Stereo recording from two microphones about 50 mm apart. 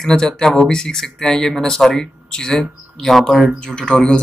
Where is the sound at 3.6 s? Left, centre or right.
Centre.